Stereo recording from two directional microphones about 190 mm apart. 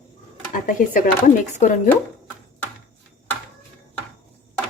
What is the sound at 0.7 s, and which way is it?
Speech, 45° left (ahead or behind).